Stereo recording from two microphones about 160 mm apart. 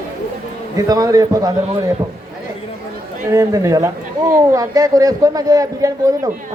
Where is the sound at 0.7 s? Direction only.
20° right (ahead or behind).